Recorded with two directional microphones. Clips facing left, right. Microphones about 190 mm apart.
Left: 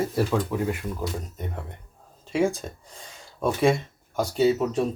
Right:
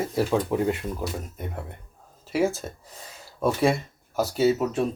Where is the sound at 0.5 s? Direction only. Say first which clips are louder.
Right 3 dB; 30° right (ahead or behind).